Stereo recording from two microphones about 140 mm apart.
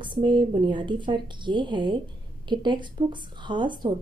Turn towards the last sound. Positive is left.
turn(degrees=-35)  # may be behind; listen again after turning